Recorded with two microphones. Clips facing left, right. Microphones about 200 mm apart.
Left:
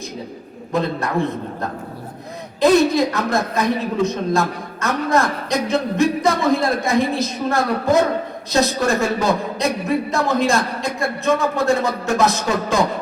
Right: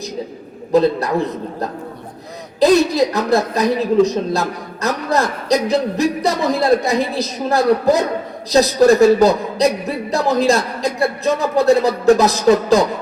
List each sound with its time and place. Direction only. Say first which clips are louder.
0.7 s a woman's voice: right 7 dB; 35° right (ahead or behind)
2.6 s a woman's voice: right 1 dB; 35° right (ahead or behind)